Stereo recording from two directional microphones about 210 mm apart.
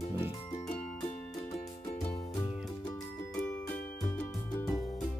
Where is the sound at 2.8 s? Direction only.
15° left (ahead or behind).